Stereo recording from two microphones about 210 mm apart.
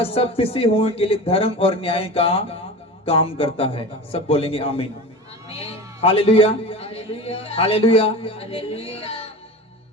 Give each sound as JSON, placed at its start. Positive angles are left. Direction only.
{"t": 0.0, "sound": "a man's voice", "side_deg": 25}